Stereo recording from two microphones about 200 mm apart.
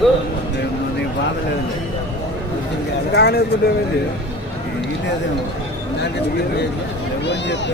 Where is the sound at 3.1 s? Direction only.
55° left (ahead or behind).